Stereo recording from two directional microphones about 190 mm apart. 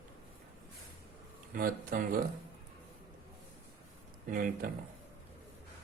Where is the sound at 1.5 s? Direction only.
50° right (ahead or behind).